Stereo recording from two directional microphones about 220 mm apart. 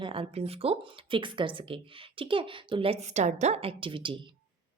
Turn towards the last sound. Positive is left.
turn(degrees=-25)  # may be behind; listen again after turning